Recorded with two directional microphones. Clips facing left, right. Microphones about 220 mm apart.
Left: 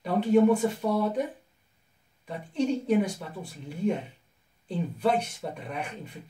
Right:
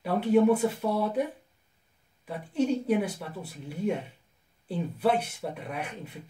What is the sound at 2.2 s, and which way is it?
Speech, 5° right (ahead or behind).